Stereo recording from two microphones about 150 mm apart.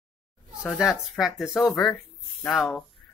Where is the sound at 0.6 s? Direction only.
Centre (ahead or behind).